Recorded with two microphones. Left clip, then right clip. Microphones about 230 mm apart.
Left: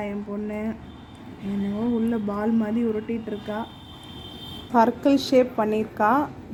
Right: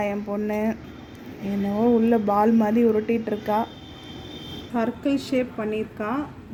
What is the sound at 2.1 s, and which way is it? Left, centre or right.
Speech, centre.